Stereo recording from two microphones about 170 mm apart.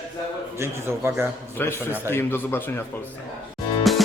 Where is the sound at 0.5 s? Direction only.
15° right (ahead or behind).